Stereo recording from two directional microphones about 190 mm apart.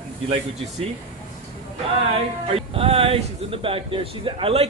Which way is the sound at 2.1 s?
30° right (ahead or behind).